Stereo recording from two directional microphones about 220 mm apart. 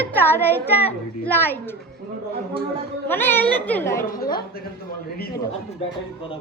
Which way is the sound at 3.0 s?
10° left (ahead or behind).